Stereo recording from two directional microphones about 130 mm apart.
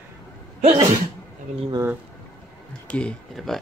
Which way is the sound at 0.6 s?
50° right (ahead or behind).